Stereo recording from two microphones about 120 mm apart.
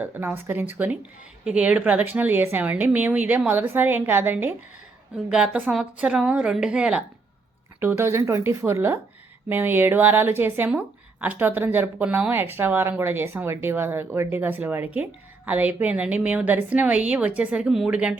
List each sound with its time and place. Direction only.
0.0 s a woman's voice: 15° right (ahead or behind)
7.8 s a woman's voice: 20° right (ahead or behind)